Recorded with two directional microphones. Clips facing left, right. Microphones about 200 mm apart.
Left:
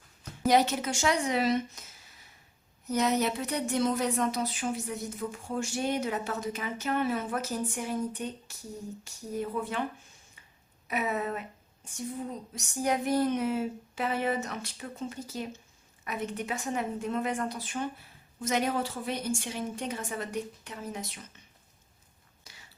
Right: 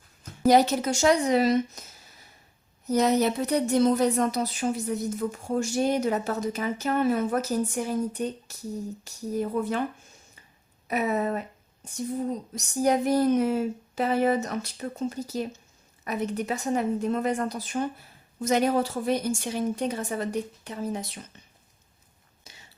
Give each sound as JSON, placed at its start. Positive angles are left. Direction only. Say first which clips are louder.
{"t": 0.4, "sound": "speech", "louder": "right 5 dB", "side_deg": -40}
{"t": 2.8, "sound": "speech", "louder": "right 5 dB", "side_deg": -35}
{"t": 10.8, "sound": "speech", "louder": "right 5 dB", "side_deg": -40}
{"t": 22.5, "sound": "a sound", "louder": "right 3 dB", "side_deg": -20}